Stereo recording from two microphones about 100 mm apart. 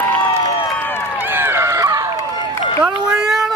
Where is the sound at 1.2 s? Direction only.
20° right (ahead or behind).